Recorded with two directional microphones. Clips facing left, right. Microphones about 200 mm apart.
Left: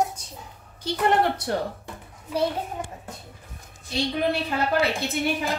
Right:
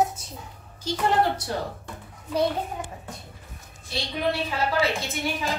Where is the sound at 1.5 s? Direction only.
60° left (ahead or behind).